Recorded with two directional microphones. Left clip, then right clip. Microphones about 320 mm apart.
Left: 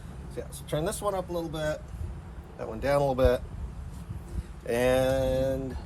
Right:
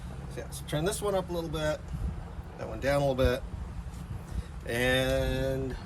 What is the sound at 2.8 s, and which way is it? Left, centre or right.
Speech, centre.